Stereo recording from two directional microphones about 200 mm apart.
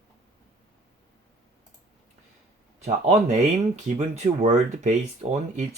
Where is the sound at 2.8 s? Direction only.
35° right (ahead or behind).